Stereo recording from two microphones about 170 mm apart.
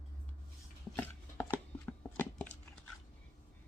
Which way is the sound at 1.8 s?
10° left (ahead or behind).